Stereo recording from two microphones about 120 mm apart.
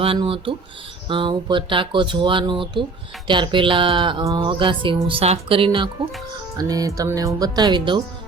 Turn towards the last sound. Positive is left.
turn(degrees=-40)  # may be behind; listen again after turning